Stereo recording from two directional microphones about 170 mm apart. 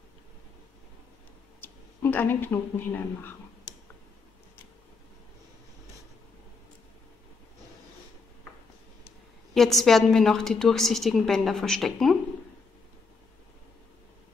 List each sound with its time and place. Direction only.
1.6 s speech: 10° left (ahead or behind)
9.5 s a woman's voice: centre (ahead or behind)